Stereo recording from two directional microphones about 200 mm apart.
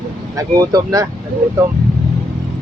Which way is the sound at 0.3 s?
20° right (ahead or behind).